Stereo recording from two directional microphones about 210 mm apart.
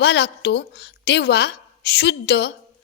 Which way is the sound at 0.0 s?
55° left (ahead or behind).